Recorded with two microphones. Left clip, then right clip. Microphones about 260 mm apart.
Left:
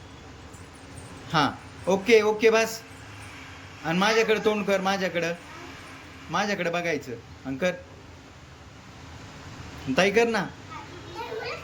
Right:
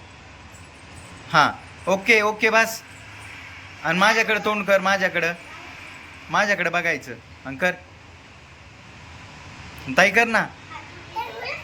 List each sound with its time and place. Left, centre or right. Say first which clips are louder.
1.3 s a man's voice: right 7 dB; centre
3.8 s a man's voice: right 4 dB; centre
9.9 s a man's voice: right 5 dB; centre